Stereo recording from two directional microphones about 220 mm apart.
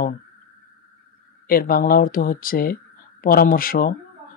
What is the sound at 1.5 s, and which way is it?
Speech, 40° left (ahead or behind).